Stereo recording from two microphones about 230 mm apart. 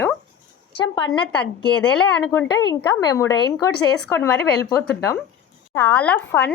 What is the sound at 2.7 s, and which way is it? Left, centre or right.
Speech, centre.